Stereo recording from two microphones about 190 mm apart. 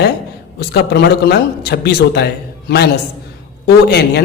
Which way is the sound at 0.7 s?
60° left (ahead or behind).